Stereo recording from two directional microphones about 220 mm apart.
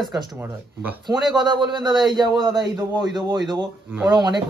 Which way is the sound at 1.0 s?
20° right (ahead or behind).